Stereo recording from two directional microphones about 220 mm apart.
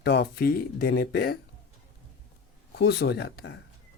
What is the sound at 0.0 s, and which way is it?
Speech, 50° left (ahead or behind).